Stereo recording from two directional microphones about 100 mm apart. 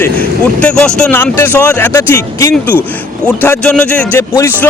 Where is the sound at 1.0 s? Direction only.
20° left (ahead or behind).